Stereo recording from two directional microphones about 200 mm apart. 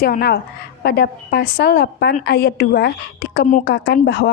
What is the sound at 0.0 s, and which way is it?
Speech, 50° left (ahead or behind).